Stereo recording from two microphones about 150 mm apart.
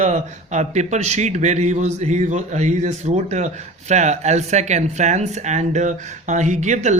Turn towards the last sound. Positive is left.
turn(degrees=-50)  # may be behind; listen again after turning